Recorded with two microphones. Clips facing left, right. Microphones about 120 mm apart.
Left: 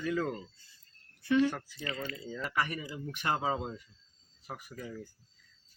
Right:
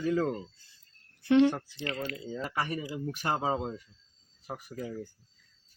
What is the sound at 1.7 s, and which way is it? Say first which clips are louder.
Speech: right 3 dB; 70° right (ahead or behind).